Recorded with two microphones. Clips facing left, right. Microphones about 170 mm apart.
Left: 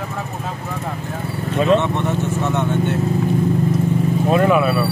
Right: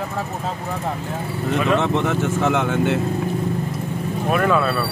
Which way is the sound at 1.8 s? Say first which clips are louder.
Even; 90° right.